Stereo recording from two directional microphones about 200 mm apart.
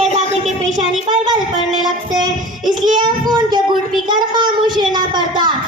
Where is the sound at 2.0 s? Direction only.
20° right (ahead or behind).